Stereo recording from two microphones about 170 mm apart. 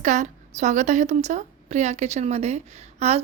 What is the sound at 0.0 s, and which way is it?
Speech, 45° right (ahead or behind).